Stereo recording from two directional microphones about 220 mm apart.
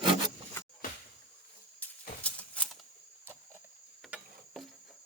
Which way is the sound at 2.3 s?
5° left (ahead or behind).